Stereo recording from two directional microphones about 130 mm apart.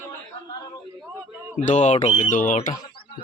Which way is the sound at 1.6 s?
65° left (ahead or behind).